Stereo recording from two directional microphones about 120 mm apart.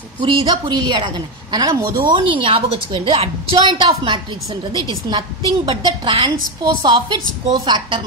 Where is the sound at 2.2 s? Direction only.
45° right (ahead or behind).